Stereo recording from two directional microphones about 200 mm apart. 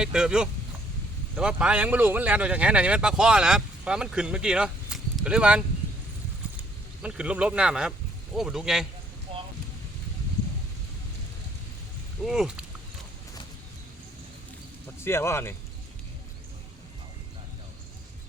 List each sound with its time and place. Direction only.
0.0 s speech: 5° right (ahead or behind)
9.3 s wind: 30° right (ahead or behind)
12.2 s speech: centre (ahead or behind)
14.9 s speech: 10° left (ahead or behind)